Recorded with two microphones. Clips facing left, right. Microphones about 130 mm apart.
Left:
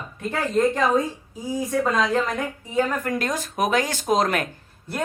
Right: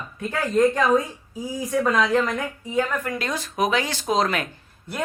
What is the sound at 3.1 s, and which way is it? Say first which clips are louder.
Speech: left 2 dB; 45° left (ahead or behind).